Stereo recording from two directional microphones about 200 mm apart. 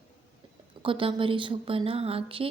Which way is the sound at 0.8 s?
25° right (ahead or behind).